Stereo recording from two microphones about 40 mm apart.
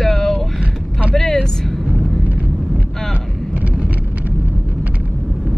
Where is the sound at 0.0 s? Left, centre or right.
Centre.